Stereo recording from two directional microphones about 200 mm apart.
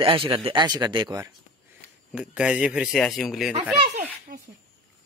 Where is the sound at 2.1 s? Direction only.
5° right (ahead or behind).